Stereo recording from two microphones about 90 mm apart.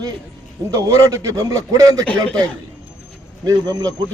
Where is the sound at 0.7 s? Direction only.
35° right (ahead or behind).